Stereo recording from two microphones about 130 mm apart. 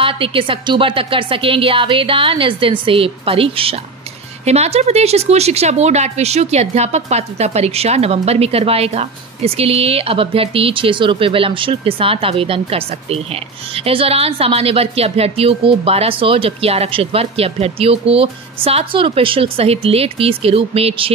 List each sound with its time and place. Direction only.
0.0 s speech: 45° right (ahead or behind)